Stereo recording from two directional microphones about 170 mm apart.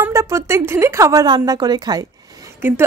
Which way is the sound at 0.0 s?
15° right (ahead or behind).